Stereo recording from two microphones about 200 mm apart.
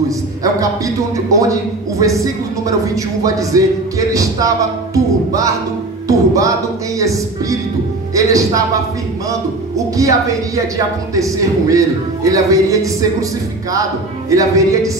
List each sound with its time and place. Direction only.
0.4 s a man's voice: 15° right (ahead or behind)
14.3 s a man's voice: 15° right (ahead or behind)